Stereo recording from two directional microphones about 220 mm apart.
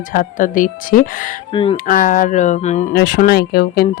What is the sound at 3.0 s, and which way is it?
Speech, 45° left (ahead or behind).